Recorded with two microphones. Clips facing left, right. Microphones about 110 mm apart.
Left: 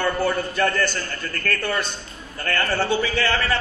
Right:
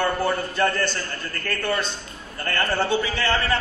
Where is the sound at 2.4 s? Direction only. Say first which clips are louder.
Left 1 dB; 25° right (ahead or behind).